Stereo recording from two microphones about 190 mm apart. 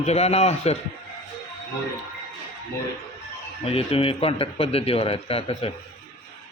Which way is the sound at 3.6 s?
30° left (ahead or behind).